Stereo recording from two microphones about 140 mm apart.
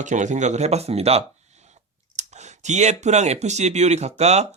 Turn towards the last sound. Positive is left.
turn(degrees=-50)  # may be behind; listen again after turning